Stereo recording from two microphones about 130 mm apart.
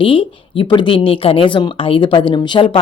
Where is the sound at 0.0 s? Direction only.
40° left (ahead or behind).